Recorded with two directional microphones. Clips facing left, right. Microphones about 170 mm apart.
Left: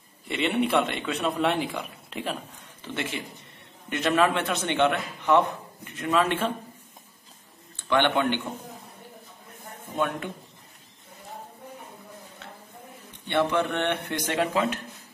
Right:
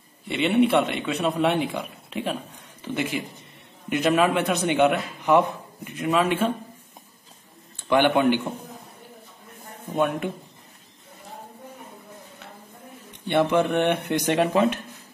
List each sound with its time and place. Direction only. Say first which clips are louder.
0.3 s a man's voice: right 5 dB; centre (ahead or behind)
7.9 s a man's voice: right 4 dB; 10° right (ahead or behind)
13.3 s a man's voice: right 4 dB; 15° right (ahead or behind)